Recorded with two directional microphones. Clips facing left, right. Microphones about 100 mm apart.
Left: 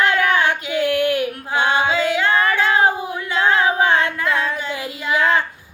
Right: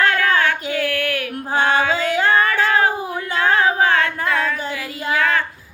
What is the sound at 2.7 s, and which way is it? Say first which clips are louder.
Child singing: left 1 dB; 20° left (ahead or behind).